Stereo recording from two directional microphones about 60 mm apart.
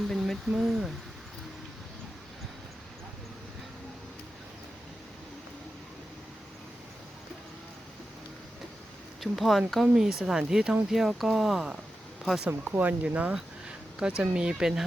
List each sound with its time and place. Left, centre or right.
0.0 s a sound: centre
0.4 s speech: centre
9.2 s speech: centre
9.8 s speech: centre
12.5 s speech: right
13.3 s a sound: centre
14.2 s speech: centre